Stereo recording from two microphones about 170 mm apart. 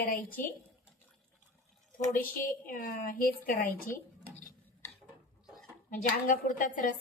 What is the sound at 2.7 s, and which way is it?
A woman's voice, 55° left (ahead or behind).